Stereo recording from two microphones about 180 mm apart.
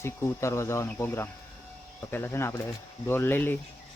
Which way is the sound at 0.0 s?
15° left (ahead or behind).